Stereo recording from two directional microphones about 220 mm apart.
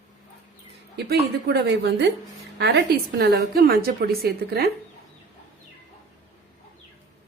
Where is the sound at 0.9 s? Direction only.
50° right (ahead or behind).